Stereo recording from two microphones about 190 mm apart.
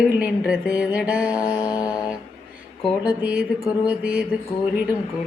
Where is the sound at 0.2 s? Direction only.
5° right (ahead or behind).